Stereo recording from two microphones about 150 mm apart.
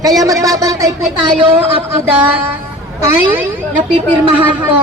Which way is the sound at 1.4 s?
35° right (ahead or behind).